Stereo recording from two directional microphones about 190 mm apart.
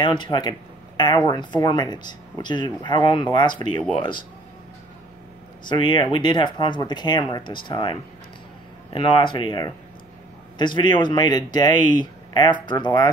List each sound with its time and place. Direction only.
0.0 s speech: 25° left (ahead or behind)
5.7 s speech: 25° left (ahead or behind)